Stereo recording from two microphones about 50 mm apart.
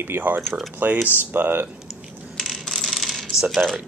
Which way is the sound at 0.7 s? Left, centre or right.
Right.